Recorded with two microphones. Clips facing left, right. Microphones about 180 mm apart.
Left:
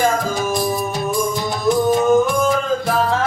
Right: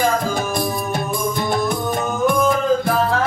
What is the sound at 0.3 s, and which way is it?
Music, 55° right (ahead or behind).